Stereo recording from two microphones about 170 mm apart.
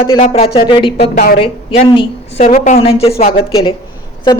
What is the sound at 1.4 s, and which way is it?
A woman's voice, 35° left (ahead or behind).